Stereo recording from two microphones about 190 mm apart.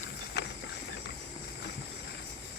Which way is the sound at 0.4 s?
65° left (ahead or behind).